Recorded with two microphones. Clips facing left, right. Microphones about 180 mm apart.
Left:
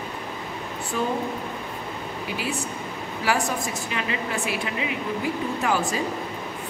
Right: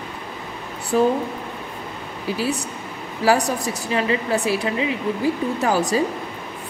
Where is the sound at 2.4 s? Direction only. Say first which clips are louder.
Right 6 dB; 35° right (ahead or behind).